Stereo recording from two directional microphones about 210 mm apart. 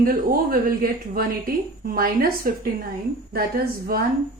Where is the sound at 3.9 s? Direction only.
45° right (ahead or behind).